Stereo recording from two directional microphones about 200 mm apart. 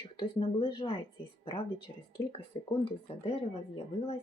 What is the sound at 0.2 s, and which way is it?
Speech, 25° left (ahead or behind).